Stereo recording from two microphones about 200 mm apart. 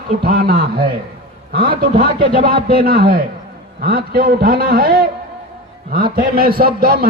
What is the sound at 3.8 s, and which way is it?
A man's voice, 50° right (ahead or behind).